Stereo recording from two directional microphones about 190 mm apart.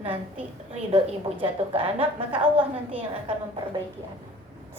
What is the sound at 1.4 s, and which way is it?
A woman's voice, 30° right (ahead or behind).